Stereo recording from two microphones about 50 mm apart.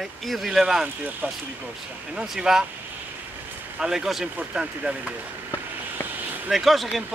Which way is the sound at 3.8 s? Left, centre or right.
Centre.